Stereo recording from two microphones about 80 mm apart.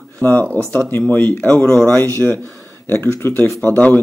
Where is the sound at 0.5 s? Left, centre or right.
Right.